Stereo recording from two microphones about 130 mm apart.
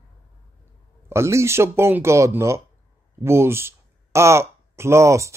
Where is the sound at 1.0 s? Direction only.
20° right (ahead or behind).